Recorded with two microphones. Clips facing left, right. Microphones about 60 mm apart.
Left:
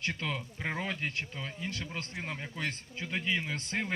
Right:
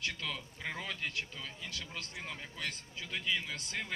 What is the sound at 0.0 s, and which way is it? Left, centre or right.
Speech, left.